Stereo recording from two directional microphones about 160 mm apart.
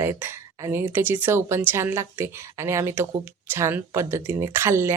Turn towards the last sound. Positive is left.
turn(degrees=-15)  # may be behind; listen again after turning